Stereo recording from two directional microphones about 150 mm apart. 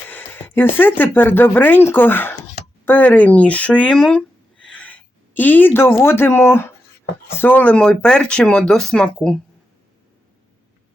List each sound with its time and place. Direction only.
0.1 s speech: 15° left (ahead or behind)